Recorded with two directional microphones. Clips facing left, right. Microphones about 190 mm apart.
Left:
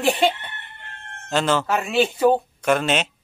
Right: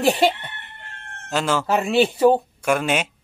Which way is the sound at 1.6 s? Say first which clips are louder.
Right 3 dB; 35° right (ahead or behind).